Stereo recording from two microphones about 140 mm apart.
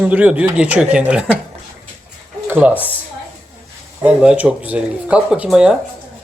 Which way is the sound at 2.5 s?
15° right (ahead or behind).